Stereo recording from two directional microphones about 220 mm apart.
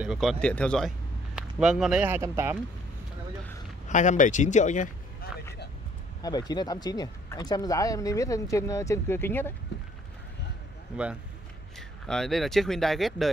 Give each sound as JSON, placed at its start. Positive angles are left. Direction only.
{"t": 0.0, "sound": "a man's voice", "side_deg": 0}
{"t": 3.9, "sound": "speech", "side_deg": 35}
{"t": 6.2, "sound": "speech", "side_deg": 20}
{"t": 9.7, "sound": "a sound", "side_deg": 50}
{"t": 12.1, "sound": "speech", "side_deg": 0}